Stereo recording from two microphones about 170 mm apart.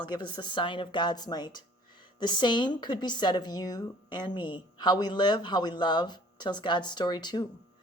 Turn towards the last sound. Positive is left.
turn(degrees=25)  # may be behind; listen again after turning